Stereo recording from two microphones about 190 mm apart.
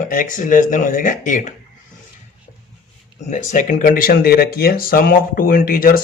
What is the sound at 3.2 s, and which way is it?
Speech, 40° left (ahead or behind).